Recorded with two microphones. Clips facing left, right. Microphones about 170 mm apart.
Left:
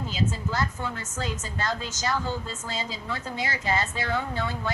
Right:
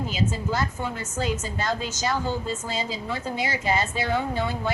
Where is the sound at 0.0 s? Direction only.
15° right (ahead or behind).